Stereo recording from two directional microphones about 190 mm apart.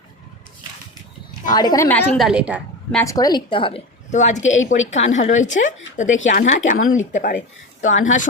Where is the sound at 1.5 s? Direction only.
20° left (ahead or behind).